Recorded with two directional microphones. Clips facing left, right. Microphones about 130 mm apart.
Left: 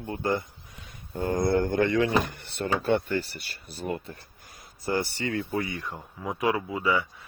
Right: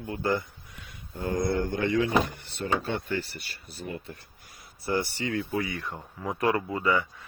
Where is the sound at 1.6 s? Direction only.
55° left (ahead or behind).